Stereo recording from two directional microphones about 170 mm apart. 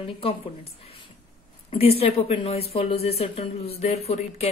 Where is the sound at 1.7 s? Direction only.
35° left (ahead or behind).